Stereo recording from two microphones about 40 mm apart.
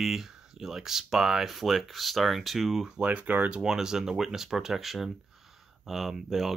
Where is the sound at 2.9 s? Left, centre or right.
Right.